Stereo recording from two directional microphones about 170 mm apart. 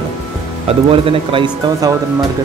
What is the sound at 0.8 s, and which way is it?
Speech, 30° right (ahead or behind).